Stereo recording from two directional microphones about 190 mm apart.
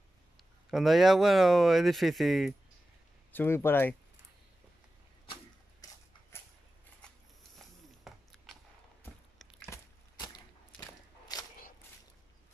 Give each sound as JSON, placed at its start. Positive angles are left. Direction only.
{"t": 0.7, "sound": "speech", "side_deg": 0}
{"t": 3.3, "sound": "speech", "side_deg": 10}
{"t": 5.2, "sound": "arrow", "side_deg": 30}
{"t": 7.0, "sound": "scissors", "side_deg": 5}
{"t": 7.5, "sound": "a sound", "side_deg": 0}
{"t": 9.0, "sound": "walk", "side_deg": 10}
{"t": 10.8, "sound": "a sound", "side_deg": 20}